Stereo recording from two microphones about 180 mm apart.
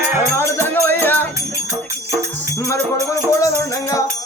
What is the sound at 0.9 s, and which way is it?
Music, 10° left (ahead or behind).